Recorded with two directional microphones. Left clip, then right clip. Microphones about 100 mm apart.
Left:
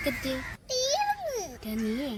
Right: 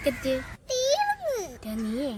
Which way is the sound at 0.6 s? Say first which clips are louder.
Right 3 dB; 30° right (ahead or behind).